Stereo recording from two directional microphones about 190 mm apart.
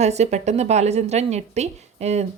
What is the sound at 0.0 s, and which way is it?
A woman's voice, 35° right (ahead or behind).